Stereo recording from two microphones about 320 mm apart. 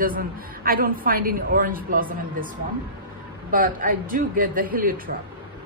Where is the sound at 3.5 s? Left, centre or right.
Right.